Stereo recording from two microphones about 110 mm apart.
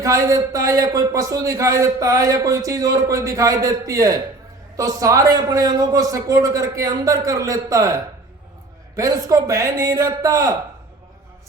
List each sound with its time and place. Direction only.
0.0 s a man's voice: 25° right (ahead or behind)